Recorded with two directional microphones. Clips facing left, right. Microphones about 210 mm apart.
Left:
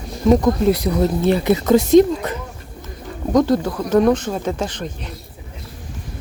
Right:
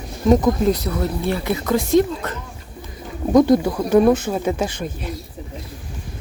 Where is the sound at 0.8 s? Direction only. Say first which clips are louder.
Left 5 dB; 20° left (ahead or behind).